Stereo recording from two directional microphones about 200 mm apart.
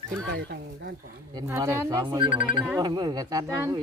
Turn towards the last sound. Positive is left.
turn(degrees=-15)  # may be behind; listen again after turning